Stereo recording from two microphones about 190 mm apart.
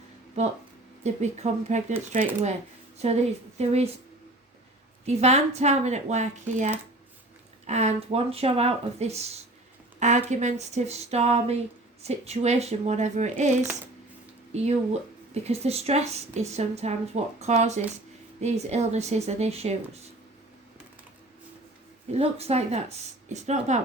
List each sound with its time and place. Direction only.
0.4 s speech: 35° right (ahead or behind)
5.0 s speech: 35° right (ahead or behind)
15.3 s speech: 35° right (ahead or behind)
22.1 s speech: 35° right (ahead or behind)